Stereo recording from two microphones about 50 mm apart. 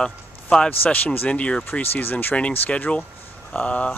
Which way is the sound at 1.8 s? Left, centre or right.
Left.